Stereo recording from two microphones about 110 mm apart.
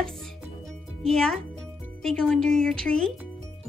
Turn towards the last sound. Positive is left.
turn(degrees=10)  # may be behind; listen again after turning